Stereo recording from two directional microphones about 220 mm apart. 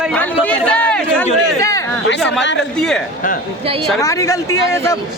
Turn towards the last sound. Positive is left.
turn(degrees=15)  # may be behind; listen again after turning